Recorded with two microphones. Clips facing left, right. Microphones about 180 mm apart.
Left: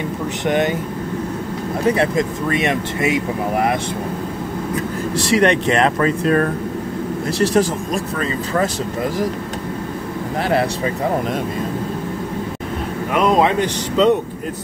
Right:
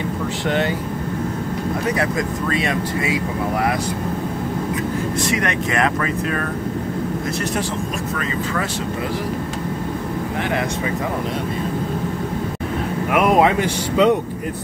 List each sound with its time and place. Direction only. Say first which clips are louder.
0.5 s speech: left 3 dB; 15° left (ahead or behind)
1.9 s speech: left 7 dB; 25° left (ahead or behind)
5.2 s speech: left 10 dB; 30° left (ahead or behind)
13.1 s speech: even; 10° right (ahead or behind)